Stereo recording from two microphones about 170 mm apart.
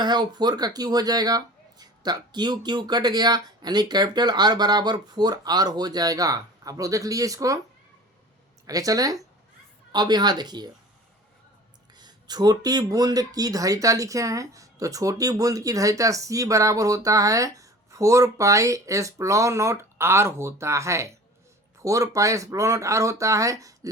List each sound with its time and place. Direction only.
0.0 s speech: 25° right (ahead or behind)
8.6 s speech: 20° right (ahead or behind)
11.9 s speech: 25° right (ahead or behind)